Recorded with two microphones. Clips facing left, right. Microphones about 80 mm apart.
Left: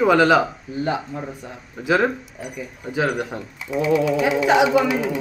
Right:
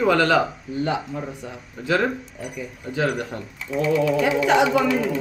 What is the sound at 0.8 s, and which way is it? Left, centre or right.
Speech, centre.